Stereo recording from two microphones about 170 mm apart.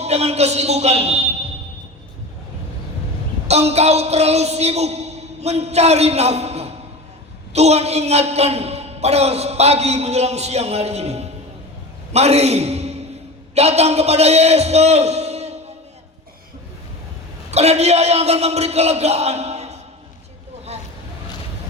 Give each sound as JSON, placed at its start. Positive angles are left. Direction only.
{"t": 0.0, "sound": "a man's voice", "side_deg": -40}
{"t": 3.4, "sound": "a woman's voice", "side_deg": -40}
{"t": 17.5, "sound": "a man's voice", "side_deg": -40}